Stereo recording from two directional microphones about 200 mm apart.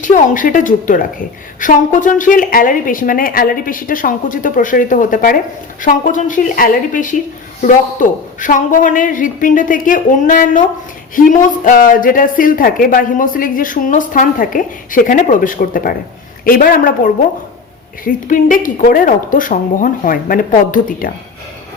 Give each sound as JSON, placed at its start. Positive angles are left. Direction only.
{"t": 0.0, "sound": "a woman's voice", "side_deg": 40}